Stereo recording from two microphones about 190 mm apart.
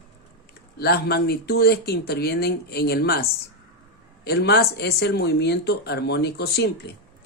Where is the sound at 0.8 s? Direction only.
60° left (ahead or behind).